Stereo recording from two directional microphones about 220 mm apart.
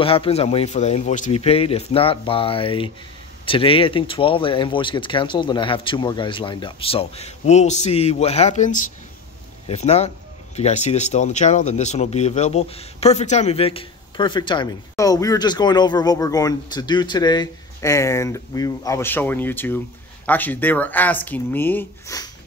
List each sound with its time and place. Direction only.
0.0 s speech: 25° left (ahead or behind)